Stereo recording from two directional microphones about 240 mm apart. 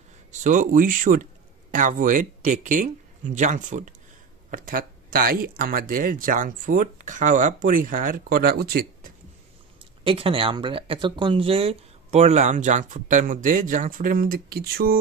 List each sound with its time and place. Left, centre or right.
0.3 s speech: right
10.0 s speech: right